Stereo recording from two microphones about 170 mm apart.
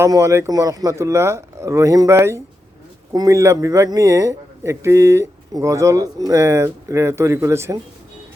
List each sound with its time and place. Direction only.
0.0 s a man's voice: 15° right (ahead or behind)